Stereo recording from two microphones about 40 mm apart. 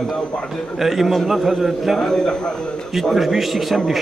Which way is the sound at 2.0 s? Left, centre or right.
Centre.